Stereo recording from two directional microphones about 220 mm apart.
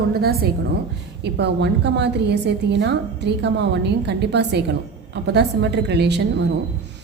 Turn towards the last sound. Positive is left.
turn(degrees=-50)  # may be behind; listen again after turning